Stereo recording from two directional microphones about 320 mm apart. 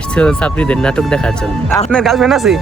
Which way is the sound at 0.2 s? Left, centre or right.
Centre.